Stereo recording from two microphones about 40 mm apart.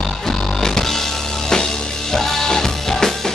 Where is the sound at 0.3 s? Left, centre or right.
Centre.